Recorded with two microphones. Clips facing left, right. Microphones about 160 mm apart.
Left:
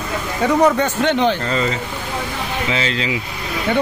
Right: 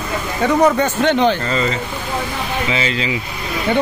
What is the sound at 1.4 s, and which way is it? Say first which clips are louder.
A man's voice: right 1 dB; centre (ahead or behind).